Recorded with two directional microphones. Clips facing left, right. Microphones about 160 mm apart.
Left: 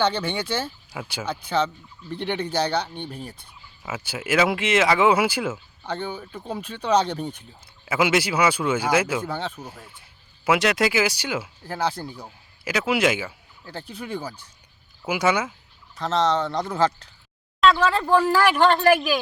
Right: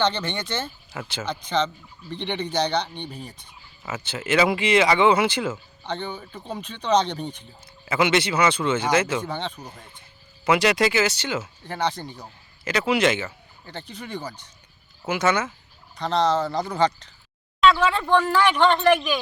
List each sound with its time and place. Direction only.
0.0 s speech: 10° left (ahead or behind)